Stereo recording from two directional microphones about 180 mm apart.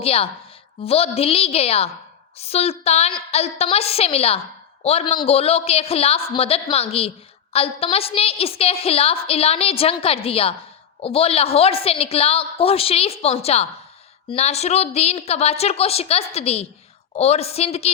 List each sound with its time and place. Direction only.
0.0 s a woman's voice: 35° left (ahead or behind)